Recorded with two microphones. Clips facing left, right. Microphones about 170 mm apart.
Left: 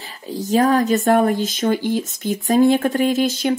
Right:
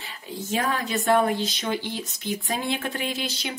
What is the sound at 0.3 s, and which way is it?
Speech, 35° left (ahead or behind).